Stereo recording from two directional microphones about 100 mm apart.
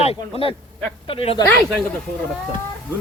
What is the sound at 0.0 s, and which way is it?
Speech, 70° left (ahead or behind).